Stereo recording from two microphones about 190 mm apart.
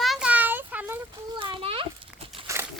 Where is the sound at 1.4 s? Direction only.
25° right (ahead or behind).